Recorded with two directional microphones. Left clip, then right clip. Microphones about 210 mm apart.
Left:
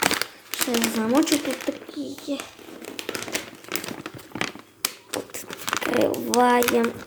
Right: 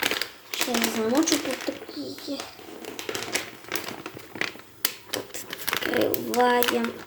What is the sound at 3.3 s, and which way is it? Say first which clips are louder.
Crumpling: even; 55° left (ahead or behind).